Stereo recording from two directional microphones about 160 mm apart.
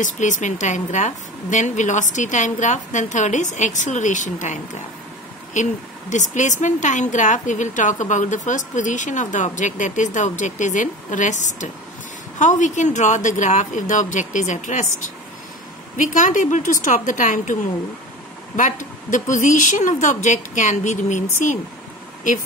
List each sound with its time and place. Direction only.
0.0 s a woman's voice: 50° left (ahead or behind)
18.6 s a woman's voice: 55° left (ahead or behind)